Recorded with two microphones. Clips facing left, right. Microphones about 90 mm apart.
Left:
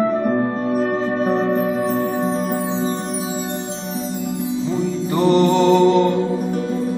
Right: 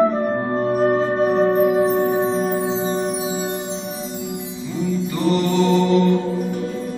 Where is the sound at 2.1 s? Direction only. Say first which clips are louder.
Right 1 dB; centre (ahead or behind).